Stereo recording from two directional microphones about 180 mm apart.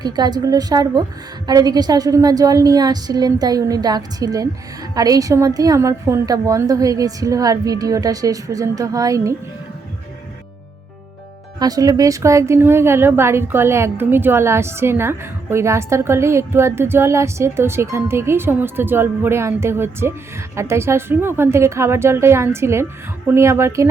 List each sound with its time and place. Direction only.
0.0 s a woman's voice: 20° right (ahead or behind)
11.6 s speech: 20° right (ahead or behind)